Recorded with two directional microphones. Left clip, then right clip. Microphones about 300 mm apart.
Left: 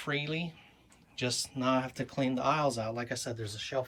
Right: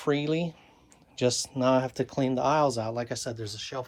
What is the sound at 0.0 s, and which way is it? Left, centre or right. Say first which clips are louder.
Speech: right 7 dB; centre.